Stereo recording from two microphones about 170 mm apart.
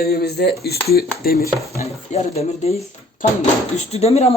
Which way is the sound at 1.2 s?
60° left (ahead or behind).